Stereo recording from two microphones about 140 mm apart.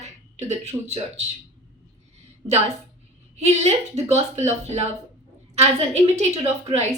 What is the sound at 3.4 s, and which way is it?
Speech, 50° right (ahead or behind).